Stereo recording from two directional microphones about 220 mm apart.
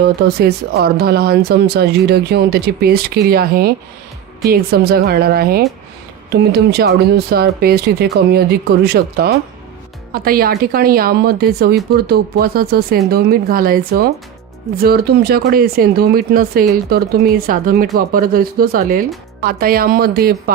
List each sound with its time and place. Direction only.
0.0 s speech: 45° right (ahead or behind)